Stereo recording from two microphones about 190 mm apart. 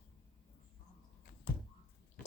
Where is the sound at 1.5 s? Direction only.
55° left (ahead or behind).